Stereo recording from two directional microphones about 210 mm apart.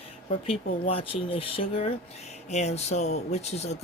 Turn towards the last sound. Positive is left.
turn(degrees=30)  # may be behind; listen again after turning